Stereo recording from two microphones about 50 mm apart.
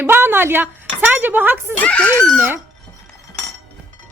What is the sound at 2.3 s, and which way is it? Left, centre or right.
Speech, right.